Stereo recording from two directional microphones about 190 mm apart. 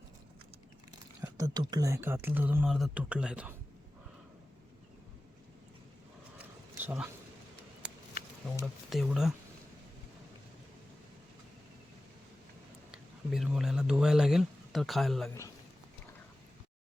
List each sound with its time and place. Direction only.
1.2 s speech: 20° right (ahead or behind)
6.7 s a sound: 10° right (ahead or behind)
8.6 s speech: centre (ahead or behind)
12.9 s speech: centre (ahead or behind)